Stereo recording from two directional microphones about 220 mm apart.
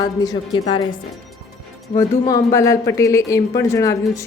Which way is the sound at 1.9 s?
15° left (ahead or behind).